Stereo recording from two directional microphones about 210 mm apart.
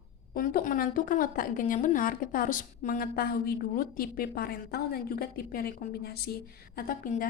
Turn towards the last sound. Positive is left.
turn(degrees=40)  # may be behind; listen again after turning